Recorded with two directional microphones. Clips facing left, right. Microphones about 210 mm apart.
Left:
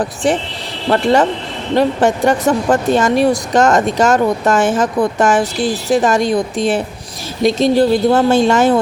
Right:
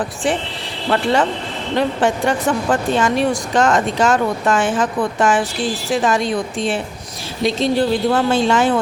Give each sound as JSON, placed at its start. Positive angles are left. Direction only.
{"t": 0.2, "sound": "speech", "side_deg": 40}